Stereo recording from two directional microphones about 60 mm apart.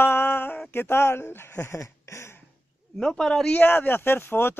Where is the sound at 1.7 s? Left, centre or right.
Left.